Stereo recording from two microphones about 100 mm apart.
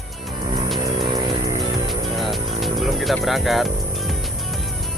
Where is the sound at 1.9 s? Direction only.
Centre (ahead or behind).